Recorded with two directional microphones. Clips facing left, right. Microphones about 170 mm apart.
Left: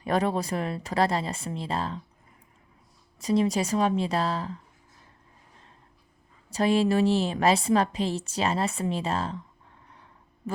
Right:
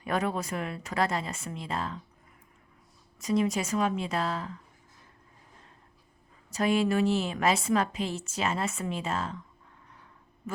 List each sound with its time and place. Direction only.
0.0 s a woman's voice: 35° left (ahead or behind)
3.2 s a woman's voice: 30° left (ahead or behind)
6.5 s a woman's voice: 30° left (ahead or behind)